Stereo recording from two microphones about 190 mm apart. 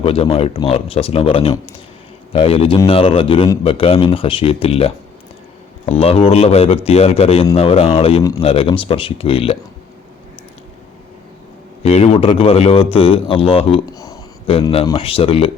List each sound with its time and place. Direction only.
0.0 s a man's voice: 30° left (ahead or behind)
6.0 s a man's voice: 30° left (ahead or behind)
11.8 s speech: 35° left (ahead or behind)
13.9 s a sound: 20° left (ahead or behind)
14.8 s a man's voice: 25° left (ahead or behind)